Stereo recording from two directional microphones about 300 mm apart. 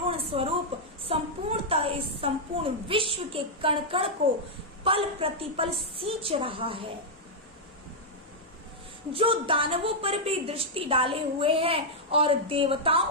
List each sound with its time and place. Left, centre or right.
0.0 s a sound: centre
1.1 s a woman's voice: centre
9.1 s a woman's voice: centre